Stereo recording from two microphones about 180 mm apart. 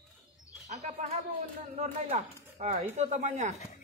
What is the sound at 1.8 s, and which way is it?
A man's voice, 40° right (ahead or behind).